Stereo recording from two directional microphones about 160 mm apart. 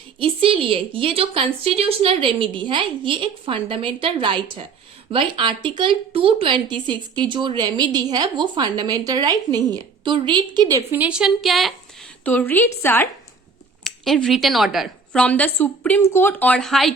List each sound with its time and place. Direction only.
0.2 s a woman's voice: 35° right (ahead or behind)
10.9 s a woman's voice: 5° right (ahead or behind)
12.2 s a woman's voice: 10° left (ahead or behind)
13.8 s a woman's voice: centre (ahead or behind)